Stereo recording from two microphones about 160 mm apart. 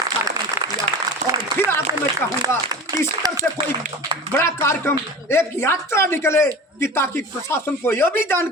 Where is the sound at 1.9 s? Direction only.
20° right (ahead or behind).